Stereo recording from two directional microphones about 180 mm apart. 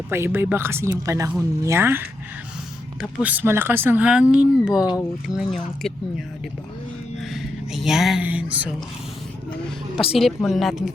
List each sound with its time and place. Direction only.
0.1 s speech: 10° right (ahead or behind)
4.9 s speech: 20° left (ahead or behind)
5.4 s speech: centre (ahead or behind)
7.2 s speech: centre (ahead or behind)
9.9 s speech: 30° left (ahead or behind)
10.2 s speech: centre (ahead or behind)